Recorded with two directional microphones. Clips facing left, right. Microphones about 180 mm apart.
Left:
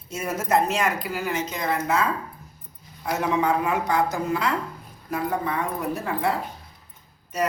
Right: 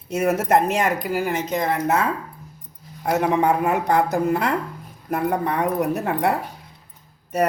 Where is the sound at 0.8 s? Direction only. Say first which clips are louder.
Right 4 dB; 50° right (ahead or behind).